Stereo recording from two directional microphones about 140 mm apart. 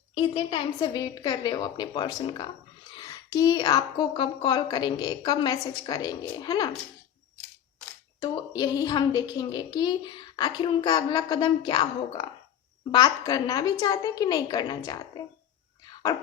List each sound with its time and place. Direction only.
0.1 s a child's voice: 40° left (ahead or behind)
8.2 s a child's voice: 30° left (ahead or behind)